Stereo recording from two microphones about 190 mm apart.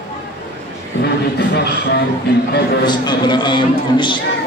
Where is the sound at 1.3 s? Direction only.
60° left (ahead or behind).